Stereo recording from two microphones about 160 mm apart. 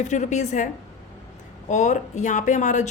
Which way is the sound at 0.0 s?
50° left (ahead or behind).